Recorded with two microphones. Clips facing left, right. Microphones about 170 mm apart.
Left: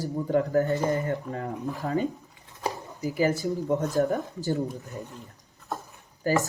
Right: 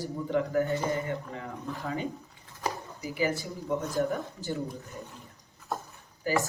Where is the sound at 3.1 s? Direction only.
45° left (ahead or behind).